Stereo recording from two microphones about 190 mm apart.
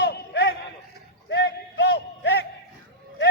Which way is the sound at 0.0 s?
60° left (ahead or behind).